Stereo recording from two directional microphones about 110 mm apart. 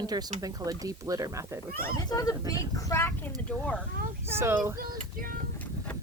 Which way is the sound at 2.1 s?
30° left (ahead or behind).